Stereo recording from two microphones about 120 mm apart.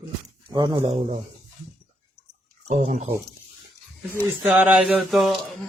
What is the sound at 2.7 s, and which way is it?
Speech, 75° right (ahead or behind).